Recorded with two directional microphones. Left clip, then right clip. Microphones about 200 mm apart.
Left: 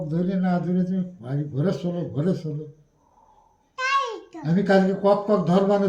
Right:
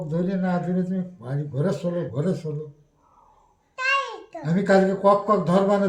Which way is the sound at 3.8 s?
10° right (ahead or behind).